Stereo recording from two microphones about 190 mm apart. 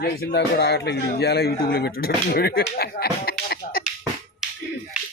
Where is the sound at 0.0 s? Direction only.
60° left (ahead or behind).